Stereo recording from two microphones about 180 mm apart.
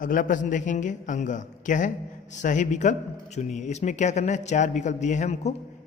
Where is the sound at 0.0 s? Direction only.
50° left (ahead or behind).